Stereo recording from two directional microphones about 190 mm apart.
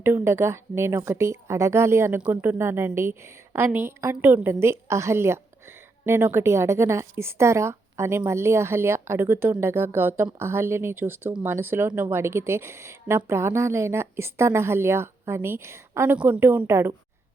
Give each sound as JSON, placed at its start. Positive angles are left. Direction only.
{"t": 0.0, "sound": "speech", "side_deg": -10}